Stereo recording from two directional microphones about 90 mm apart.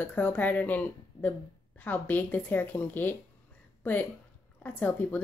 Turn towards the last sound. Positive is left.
turn(degrees=20)  # may be behind; listen again after turning